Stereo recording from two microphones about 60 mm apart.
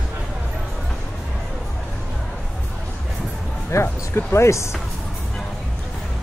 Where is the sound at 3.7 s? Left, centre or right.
Left.